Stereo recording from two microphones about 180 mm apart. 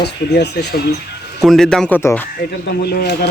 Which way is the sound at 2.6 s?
65° left (ahead or behind).